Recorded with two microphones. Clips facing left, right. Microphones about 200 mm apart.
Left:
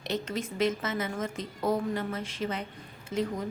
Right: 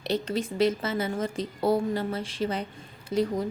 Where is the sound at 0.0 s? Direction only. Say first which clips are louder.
Right 4 dB; 30° right (ahead or behind).